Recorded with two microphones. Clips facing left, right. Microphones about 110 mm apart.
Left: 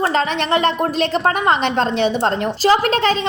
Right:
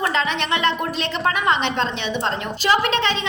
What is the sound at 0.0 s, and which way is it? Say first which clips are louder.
A woman's voice: left 4 dB; 40° left (ahead or behind).